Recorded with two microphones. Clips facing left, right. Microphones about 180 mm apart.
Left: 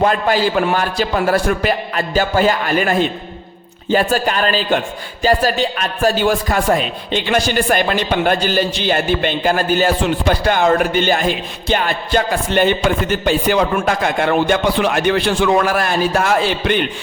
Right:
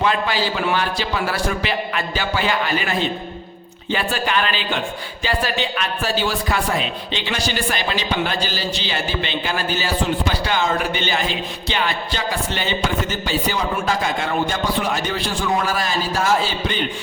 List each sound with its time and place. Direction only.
0.0 s a man's voice: 50° left (ahead or behind)